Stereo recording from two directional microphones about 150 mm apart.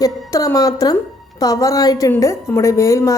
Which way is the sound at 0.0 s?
20° left (ahead or behind).